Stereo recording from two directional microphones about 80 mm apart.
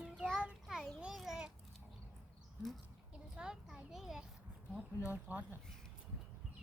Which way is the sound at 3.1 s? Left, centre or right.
Centre.